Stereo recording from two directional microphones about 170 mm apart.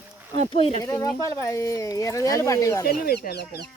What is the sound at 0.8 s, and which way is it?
Speech, 20° left (ahead or behind).